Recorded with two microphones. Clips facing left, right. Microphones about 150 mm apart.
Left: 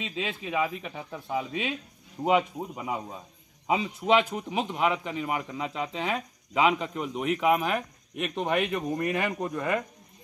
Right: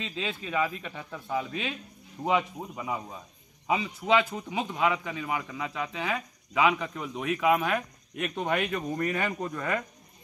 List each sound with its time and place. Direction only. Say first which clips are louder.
0.0 s speech: left 1 dB; 5° left (ahead or behind)